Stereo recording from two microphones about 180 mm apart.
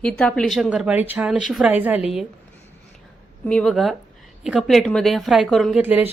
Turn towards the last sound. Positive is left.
turn(degrees=-10)  # may be behind; listen again after turning